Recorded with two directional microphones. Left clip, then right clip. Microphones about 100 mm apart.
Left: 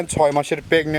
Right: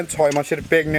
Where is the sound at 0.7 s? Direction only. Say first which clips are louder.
Right 1 dB; 10° left (ahead or behind).